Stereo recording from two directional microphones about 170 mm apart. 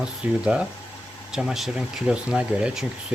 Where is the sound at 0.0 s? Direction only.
5° right (ahead or behind).